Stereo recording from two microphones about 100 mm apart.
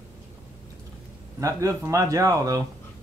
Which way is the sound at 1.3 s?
30° right (ahead or behind).